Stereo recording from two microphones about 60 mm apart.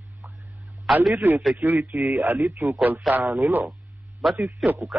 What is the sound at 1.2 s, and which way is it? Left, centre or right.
A man's voice, right.